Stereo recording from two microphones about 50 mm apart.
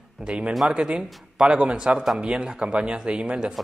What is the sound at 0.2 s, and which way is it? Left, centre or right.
A man's voice, centre.